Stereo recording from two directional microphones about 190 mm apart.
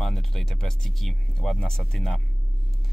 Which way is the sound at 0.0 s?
Centre (ahead or behind).